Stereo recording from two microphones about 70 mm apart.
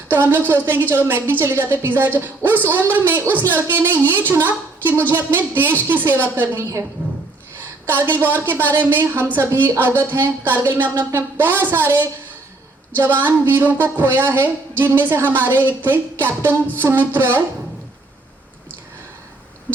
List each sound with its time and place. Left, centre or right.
0.1 s a woman's voice: right
7.0 s a sound: right
7.9 s a woman's voice: right